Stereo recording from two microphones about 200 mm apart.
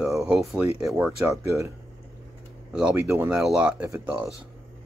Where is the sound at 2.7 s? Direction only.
5° right (ahead or behind).